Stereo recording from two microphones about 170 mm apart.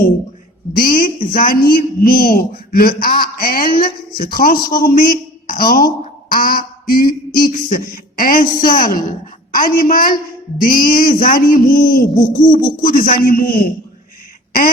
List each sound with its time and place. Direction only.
0.8 s a man's voice: 60° left (ahead or behind)
6.3 s a sound: 60° left (ahead or behind)
7.3 s a man's voice: 55° left (ahead or behind)